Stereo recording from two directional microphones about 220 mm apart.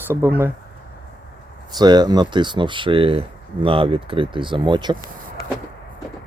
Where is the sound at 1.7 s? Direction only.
20° right (ahead or behind).